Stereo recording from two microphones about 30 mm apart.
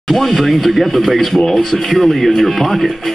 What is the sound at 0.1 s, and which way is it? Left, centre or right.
Speech, centre.